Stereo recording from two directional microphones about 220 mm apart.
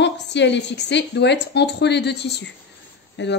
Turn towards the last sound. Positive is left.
turn(degrees=50)  # may be behind; listen again after turning